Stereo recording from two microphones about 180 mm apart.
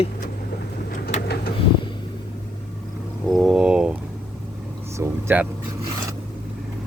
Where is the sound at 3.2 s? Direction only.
Centre (ahead or behind).